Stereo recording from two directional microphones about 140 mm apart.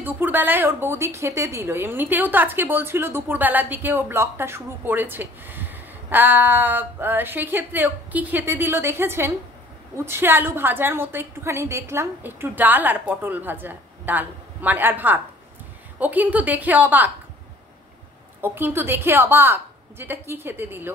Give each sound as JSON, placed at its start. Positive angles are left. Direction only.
{"t": 0.0, "sound": "a woman's voice", "side_deg": -15}
{"t": 18.4, "sound": "a woman's voice", "side_deg": -15}